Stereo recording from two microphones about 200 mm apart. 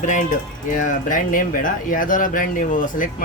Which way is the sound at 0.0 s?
40° left (ahead or behind).